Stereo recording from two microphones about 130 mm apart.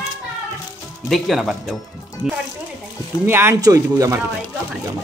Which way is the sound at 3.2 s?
20° right (ahead or behind).